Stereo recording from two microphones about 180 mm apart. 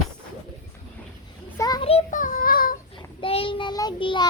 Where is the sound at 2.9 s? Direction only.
30° left (ahead or behind).